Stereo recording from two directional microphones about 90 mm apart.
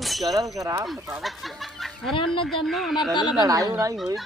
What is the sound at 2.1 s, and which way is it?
Speech, 75° left (ahead or behind).